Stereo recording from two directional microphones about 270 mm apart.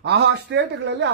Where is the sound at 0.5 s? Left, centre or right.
Right.